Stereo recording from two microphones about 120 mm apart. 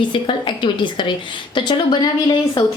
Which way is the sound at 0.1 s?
40° left (ahead or behind).